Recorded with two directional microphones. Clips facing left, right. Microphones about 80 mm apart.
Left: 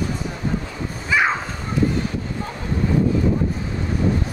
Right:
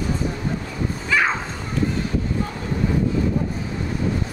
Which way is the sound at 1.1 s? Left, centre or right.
Centre.